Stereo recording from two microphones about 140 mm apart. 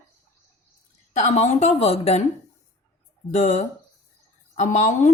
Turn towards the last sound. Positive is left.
turn(degrees=60)  # may be behind; listen again after turning